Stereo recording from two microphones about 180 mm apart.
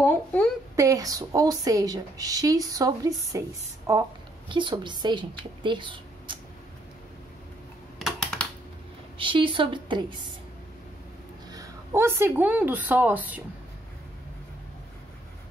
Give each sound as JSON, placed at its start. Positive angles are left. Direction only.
{"t": 0.0, "sound": "a sound", "side_deg": 10}
{"t": 0.7, "sound": "a woman's voice", "side_deg": -20}
{"t": 8.0, "sound": "computer keyboard", "side_deg": 0}
{"t": 9.2, "sound": "a woman's voice", "side_deg": -30}
{"t": 11.5, "sound": "a woman's voice", "side_deg": -15}